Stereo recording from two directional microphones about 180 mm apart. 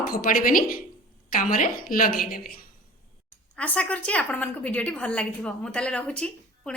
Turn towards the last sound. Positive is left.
turn(degrees=5)  # may be behind; listen again after turning